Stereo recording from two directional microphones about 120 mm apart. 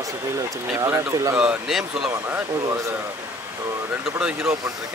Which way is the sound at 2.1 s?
25° right (ahead or behind).